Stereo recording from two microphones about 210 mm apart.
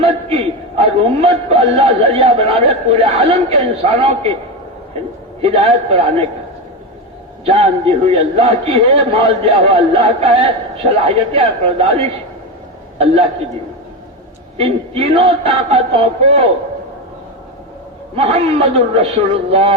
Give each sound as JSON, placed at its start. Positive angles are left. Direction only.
{"t": 0.0, "sound": "a sound", "side_deg": -30}
{"t": 0.8, "sound": "a man's voice", "side_deg": -30}
{"t": 5.4, "sound": "a man's voice", "side_deg": -25}
{"t": 7.4, "sound": "a man's voice", "side_deg": -30}
{"t": 14.6, "sound": "a man's voice", "side_deg": -25}
{"t": 18.2, "sound": "a man's voice", "side_deg": -30}